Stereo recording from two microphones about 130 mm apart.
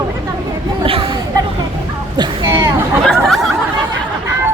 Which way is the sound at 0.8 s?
45° right (ahead or behind).